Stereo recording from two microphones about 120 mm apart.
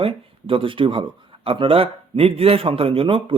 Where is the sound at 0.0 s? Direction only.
50° right (ahead or behind).